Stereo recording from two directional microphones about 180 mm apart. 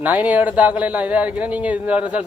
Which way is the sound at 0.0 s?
10° right (ahead or behind).